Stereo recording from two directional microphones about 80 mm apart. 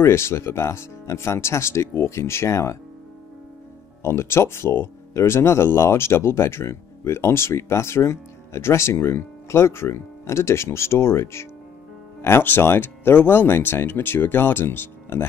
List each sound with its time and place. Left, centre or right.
0.0 s speech: left
4.0 s speech: left